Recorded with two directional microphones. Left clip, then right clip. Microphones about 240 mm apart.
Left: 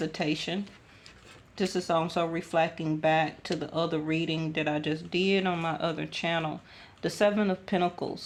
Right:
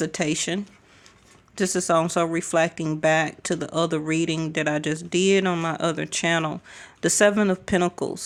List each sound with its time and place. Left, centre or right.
0.0 s speech: right